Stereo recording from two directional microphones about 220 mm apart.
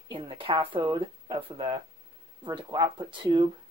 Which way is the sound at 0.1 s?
25° right (ahead or behind).